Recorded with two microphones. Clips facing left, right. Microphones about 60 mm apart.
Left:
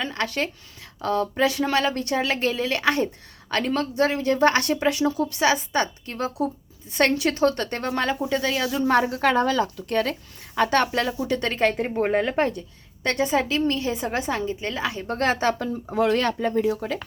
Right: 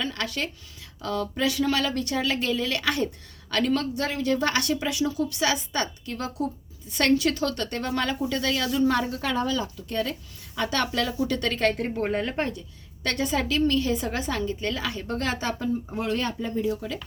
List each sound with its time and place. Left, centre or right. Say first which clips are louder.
0.0 s a woman's voice: left 3 dB; left
8.6 s speech: right 1 dB; centre
9.0 s a woman's voice: left 6 dB; left
15.1 s a woman's voice: left 7 dB; left
15.9 s speech: left 7 dB; left